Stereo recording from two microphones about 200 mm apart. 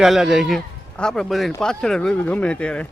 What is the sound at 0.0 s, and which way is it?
Speech, centre (ahead or behind).